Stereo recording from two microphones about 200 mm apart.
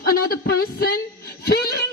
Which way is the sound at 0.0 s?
50° left (ahead or behind).